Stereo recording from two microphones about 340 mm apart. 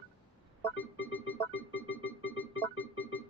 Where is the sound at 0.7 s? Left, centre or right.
Left.